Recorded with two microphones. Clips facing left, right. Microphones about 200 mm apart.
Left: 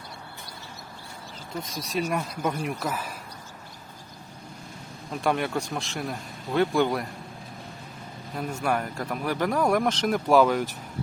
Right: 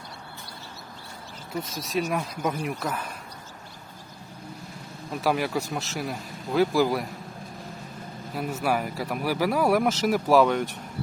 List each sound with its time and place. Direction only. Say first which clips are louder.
1.5 s speech: right 2 dB; centre (ahead or behind)
5.1 s speech: right 1 dB; 5° right (ahead or behind)
8.3 s speech: right 1 dB; 5° right (ahead or behind)